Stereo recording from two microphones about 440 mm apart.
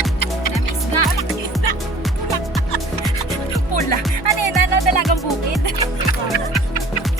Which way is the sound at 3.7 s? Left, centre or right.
Left.